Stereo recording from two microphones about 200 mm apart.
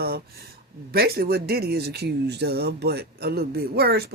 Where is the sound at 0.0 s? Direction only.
50° right (ahead or behind).